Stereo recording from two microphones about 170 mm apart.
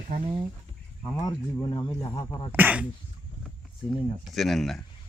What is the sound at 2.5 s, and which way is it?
Speech, 10° right (ahead or behind).